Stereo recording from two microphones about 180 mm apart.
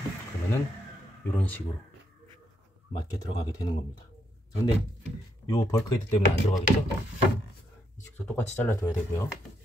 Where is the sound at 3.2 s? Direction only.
20° left (ahead or behind).